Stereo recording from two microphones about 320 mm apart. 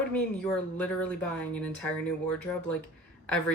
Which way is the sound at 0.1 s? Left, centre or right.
Centre.